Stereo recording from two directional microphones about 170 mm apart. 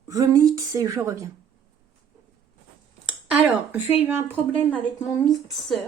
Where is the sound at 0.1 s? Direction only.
20° right (ahead or behind).